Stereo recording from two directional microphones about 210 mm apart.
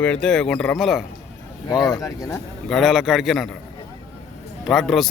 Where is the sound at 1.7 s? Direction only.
20° left (ahead or behind).